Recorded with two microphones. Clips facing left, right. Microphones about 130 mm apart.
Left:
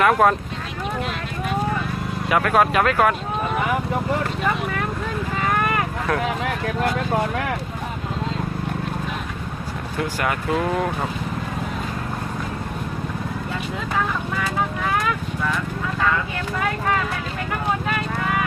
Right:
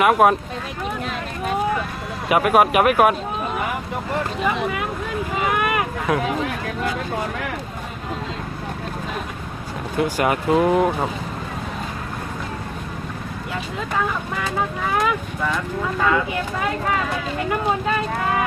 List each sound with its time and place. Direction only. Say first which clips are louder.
0.0 s speech: right 1 dB; 15° right (ahead or behind)
2.3 s speech: right 2 dB; 20° right (ahead or behind)
5.4 s a sound: right 1 dB; 15° right (ahead or behind)
10.2 s speech: right 5 dB; 20° right (ahead or behind)